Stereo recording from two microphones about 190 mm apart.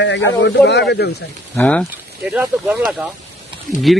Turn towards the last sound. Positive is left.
turn(degrees=0)  # may be behind; listen again after turning